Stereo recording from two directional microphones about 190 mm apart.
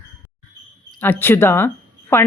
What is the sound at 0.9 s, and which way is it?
Speech, 10° left (ahead or behind).